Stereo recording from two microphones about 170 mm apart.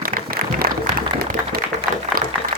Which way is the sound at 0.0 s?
55° right (ahead or behind).